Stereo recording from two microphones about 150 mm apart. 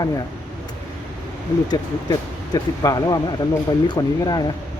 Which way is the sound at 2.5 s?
25° left (ahead or behind).